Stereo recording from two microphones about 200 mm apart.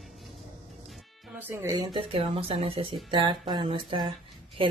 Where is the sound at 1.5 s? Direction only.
15° right (ahead or behind).